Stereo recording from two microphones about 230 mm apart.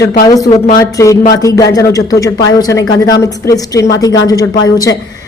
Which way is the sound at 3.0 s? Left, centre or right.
Centre.